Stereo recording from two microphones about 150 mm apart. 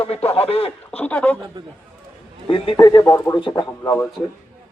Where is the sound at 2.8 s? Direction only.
25° left (ahead or behind).